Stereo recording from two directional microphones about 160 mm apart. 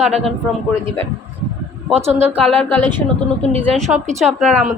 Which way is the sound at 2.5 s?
10° left (ahead or behind).